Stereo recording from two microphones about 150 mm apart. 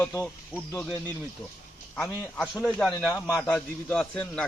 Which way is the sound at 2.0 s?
Centre (ahead or behind).